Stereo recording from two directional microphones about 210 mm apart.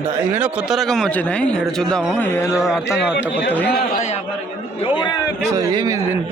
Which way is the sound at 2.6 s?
5° right (ahead or behind).